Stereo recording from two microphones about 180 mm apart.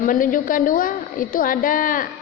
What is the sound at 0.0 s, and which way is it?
A woman's voice, 50° left (ahead or behind).